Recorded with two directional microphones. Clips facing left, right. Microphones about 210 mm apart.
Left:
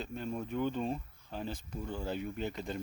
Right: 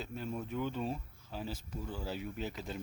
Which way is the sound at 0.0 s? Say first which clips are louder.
Left 2 dB; 5° right (ahead or behind).